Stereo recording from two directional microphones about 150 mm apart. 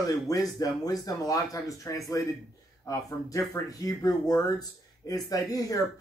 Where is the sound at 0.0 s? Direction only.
25° left (ahead or behind).